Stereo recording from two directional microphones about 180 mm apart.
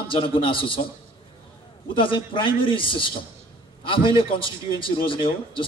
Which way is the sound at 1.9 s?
30° left (ahead or behind).